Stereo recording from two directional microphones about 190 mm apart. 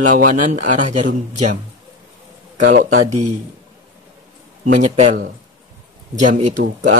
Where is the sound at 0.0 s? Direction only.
45° right (ahead or behind).